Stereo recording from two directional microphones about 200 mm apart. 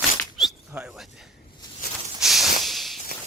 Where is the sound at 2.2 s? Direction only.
Centre (ahead or behind).